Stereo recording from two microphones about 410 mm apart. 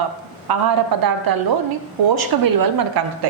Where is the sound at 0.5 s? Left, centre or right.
Right.